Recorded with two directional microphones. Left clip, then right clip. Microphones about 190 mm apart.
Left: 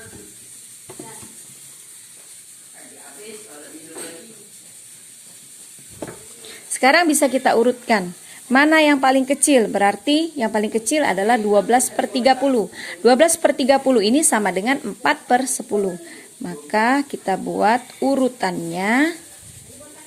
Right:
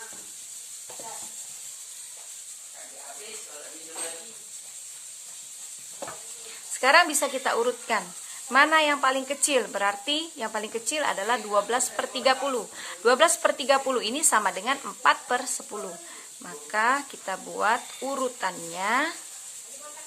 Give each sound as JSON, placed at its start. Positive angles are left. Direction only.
{"t": 6.5, "sound": "a woman's voice", "side_deg": 30}